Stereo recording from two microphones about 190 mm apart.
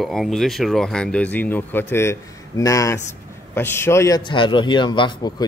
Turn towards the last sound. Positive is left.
turn(degrees=25)  # may be behind; listen again after turning